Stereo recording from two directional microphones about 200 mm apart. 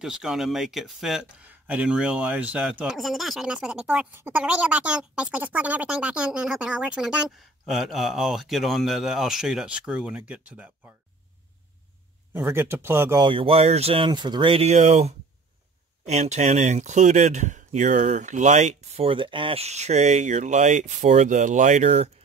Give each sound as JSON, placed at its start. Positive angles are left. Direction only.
{"t": 0.0, "sound": "speech", "side_deg": -5}
{"t": 12.4, "sound": "speech", "side_deg": -10}
{"t": 13.2, "sound": "speech", "side_deg": -25}